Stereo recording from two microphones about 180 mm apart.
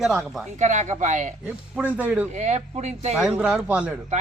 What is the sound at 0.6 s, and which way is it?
Speech, 40° right (ahead or behind).